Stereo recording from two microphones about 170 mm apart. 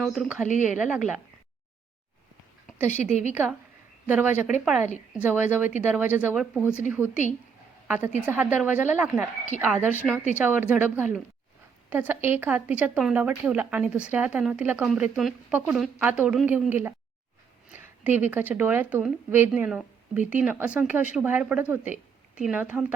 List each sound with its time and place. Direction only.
0.0 s speech: centre (ahead or behind)
0.4 s a woman's voice: 45° left (ahead or behind)
0.8 s speech: 5° right (ahead or behind)
3.0 s a woman's voice: 45° left (ahead or behind)
4.1 s speech: 10° right (ahead or behind)
7.9 s a woman's voice: 10° right (ahead or behind)